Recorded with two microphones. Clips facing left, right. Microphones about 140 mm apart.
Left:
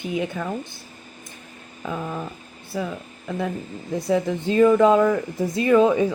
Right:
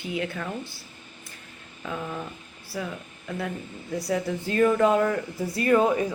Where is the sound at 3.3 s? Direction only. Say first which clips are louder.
Left 5 dB; 20° left (ahead or behind).